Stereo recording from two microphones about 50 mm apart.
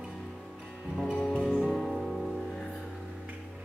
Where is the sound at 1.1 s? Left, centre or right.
Centre.